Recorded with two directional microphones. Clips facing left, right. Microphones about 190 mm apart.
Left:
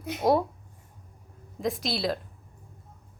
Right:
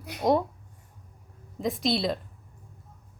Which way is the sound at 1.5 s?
Centre (ahead or behind).